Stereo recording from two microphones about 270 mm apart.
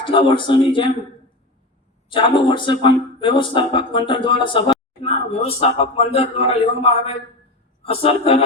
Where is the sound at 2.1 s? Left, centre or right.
Centre.